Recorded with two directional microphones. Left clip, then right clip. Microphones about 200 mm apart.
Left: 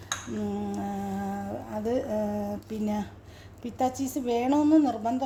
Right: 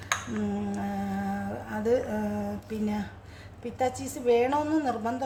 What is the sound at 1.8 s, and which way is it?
Speech, 20° left (ahead or behind).